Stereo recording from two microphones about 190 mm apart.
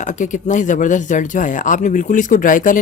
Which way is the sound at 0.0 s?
40° left (ahead or behind).